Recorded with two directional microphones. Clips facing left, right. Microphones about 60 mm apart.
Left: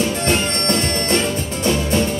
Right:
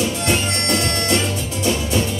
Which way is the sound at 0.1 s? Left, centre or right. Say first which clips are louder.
Left 2 dB; left.